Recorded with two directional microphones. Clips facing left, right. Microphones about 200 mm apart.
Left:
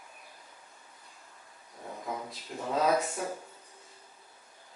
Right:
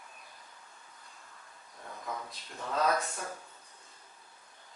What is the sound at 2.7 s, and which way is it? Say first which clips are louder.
Speech: left 3 dB; 15° left (ahead or behind).